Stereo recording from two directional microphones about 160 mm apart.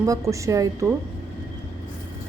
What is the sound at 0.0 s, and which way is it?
Speech, 20° right (ahead or behind).